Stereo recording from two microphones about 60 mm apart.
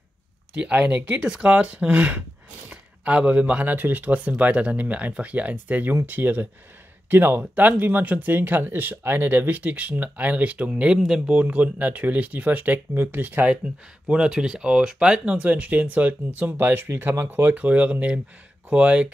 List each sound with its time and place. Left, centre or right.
0.6 s speech: right
11.0 s speech: centre
11.2 s speech: right
14.0 s speech: centre; by 16.9 s right
16.9 s speech: right
17.5 s speech: right